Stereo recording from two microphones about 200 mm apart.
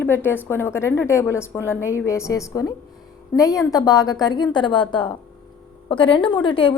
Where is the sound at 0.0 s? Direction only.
10° left (ahead or behind).